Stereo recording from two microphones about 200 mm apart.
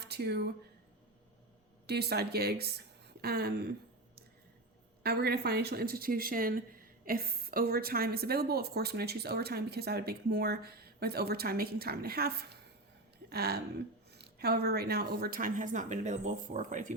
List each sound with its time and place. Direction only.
0.0 s speech: 55° right (ahead or behind)
1.9 s speech: 55° right (ahead or behind)
5.0 s speech: 55° right (ahead or behind)